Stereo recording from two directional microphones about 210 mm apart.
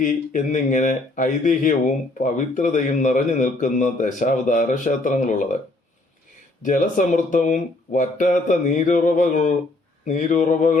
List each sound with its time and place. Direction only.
0.0 s a man's voice: 40° left (ahead or behind)
6.6 s a man's voice: 35° left (ahead or behind)